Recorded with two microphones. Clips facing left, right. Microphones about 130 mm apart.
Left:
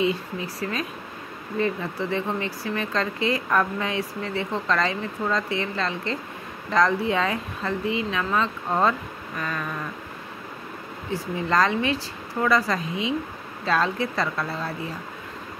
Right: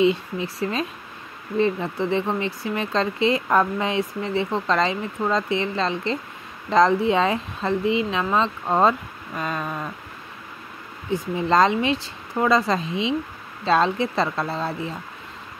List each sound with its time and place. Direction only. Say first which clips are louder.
0.0 s speech: right 5 dB; 25° right (ahead or behind)
11.1 s speech: right 4 dB; 20° right (ahead or behind)